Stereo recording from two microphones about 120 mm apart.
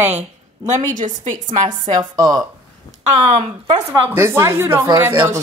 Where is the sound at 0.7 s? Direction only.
90° right.